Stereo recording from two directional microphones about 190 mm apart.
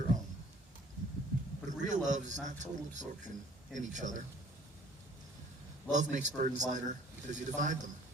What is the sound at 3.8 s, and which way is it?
Speech, 40° right (ahead or behind).